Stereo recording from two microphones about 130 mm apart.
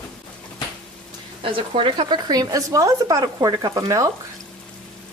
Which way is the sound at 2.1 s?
30° right (ahead or behind).